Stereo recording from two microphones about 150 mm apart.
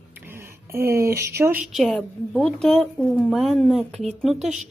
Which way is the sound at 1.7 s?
Centre (ahead or behind).